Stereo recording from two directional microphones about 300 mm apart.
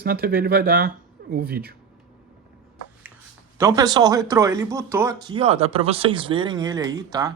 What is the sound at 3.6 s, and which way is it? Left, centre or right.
Speech, centre.